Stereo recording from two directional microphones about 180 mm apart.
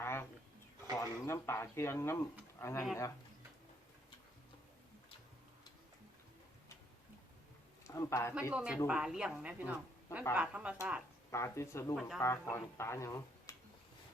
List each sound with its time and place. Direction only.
0.0 s a sound: 15° left (ahead or behind)
0.9 s speech: 15° left (ahead or behind)
7.9 s a man's voice: 15° left (ahead or behind)
8.5 s a woman's voice: 5° right (ahead or behind)
11.3 s speech: 15° left (ahead or behind)
11.9 s speech: centre (ahead or behind)
12.2 s speech: 15° left (ahead or behind)